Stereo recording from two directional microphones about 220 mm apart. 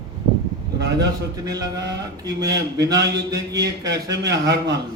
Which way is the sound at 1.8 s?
50° right (ahead or behind).